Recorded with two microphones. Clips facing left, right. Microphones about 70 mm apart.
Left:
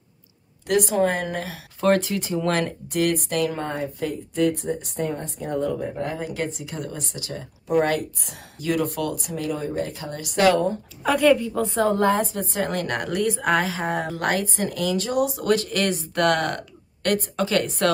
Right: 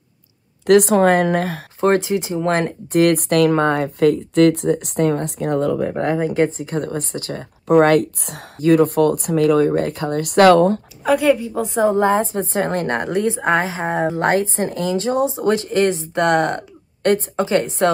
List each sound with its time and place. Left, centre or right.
0.7 s speech: right
1.8 s a woman's voice: right
3.1 s speech: right
6.1 s speech: right
8.5 s speech: right
11.1 s a woman's voice: centre
11.6 s a woman's voice: centre